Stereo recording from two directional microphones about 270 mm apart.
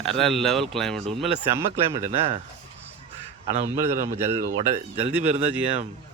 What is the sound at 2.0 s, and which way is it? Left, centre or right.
Speech, right.